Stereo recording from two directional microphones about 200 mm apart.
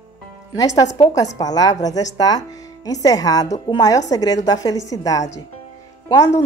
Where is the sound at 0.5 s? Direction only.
20° left (ahead or behind).